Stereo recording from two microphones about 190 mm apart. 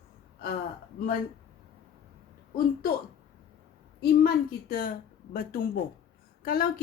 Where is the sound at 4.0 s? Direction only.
50° left (ahead or behind).